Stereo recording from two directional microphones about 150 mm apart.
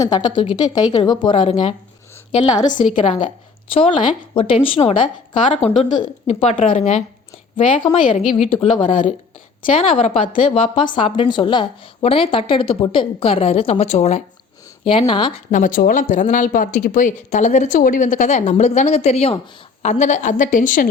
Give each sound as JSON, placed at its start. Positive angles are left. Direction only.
{"t": 0.0, "sound": "a woman's voice", "side_deg": 25}
{"t": 7.5, "sound": "a woman's voice", "side_deg": 35}
{"t": 14.8, "sound": "a woman's voice", "side_deg": 35}
{"t": 15.4, "sound": "speech", "side_deg": 60}